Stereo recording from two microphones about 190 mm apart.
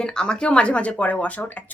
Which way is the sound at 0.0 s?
5° left (ahead or behind).